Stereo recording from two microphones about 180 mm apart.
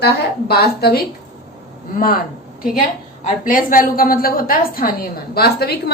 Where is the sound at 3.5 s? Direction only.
50° left (ahead or behind).